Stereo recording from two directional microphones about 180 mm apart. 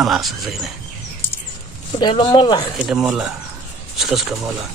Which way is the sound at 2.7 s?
Centre (ahead or behind).